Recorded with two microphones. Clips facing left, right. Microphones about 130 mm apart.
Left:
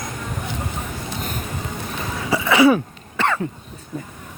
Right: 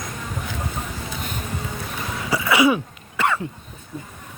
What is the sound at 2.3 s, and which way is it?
Throat clearing, 25° left (ahead or behind).